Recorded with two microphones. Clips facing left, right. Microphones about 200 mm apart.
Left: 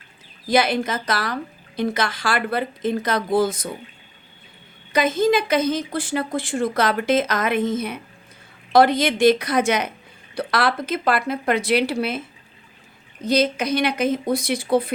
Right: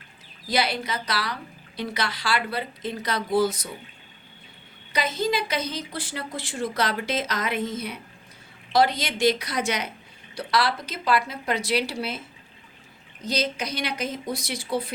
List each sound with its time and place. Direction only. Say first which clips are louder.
0.4 s speech: left 7 dB; 50° left (ahead or behind)
4.9 s speech: left 7 dB; 50° left (ahead or behind)
13.2 s speech: left 8 dB; 55° left (ahead or behind)